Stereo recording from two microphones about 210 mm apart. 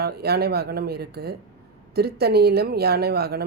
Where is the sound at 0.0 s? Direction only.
50° right (ahead or behind).